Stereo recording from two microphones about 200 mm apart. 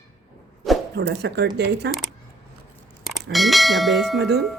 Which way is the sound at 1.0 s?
55° right (ahead or behind).